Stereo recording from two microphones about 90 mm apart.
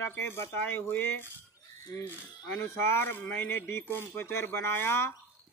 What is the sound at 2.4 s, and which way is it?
Speech, 25° left (ahead or behind).